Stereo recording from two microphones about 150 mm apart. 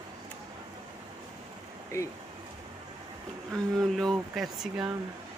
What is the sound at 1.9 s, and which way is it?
Speech, 20° left (ahead or behind).